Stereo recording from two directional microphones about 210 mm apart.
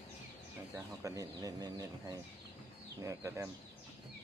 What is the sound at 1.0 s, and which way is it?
Speech, 15° right (ahead or behind).